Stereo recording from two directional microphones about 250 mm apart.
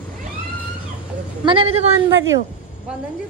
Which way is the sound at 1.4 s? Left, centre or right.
Right.